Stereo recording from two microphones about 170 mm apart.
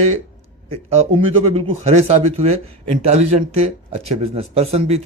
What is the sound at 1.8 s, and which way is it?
Speech, 40° right (ahead or behind).